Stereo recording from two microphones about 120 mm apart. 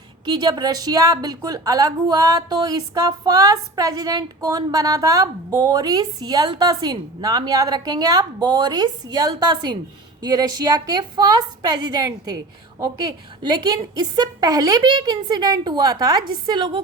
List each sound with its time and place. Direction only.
0.3 s a woman's voice: 35° right (ahead or behind)